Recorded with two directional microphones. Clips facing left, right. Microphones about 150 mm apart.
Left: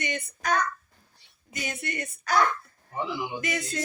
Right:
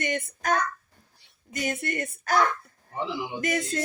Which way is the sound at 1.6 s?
45° right (ahead or behind).